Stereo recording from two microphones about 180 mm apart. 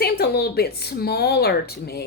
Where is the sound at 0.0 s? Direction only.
60° left (ahead or behind).